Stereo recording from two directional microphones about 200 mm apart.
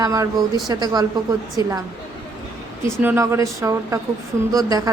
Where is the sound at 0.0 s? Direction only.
15° right (ahead or behind).